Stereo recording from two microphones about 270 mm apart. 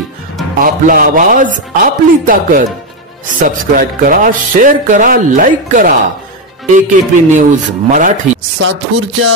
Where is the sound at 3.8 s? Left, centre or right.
Right.